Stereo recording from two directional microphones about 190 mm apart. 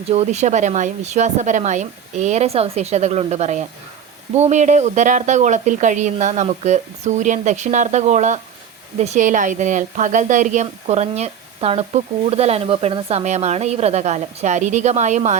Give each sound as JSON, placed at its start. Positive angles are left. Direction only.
{"t": 0.1, "sound": "speech", "side_deg": -35}